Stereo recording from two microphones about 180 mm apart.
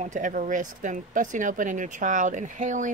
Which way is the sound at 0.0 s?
45° right (ahead or behind).